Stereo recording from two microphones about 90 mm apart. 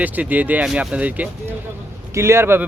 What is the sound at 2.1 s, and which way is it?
Speech, 30° right (ahead or behind).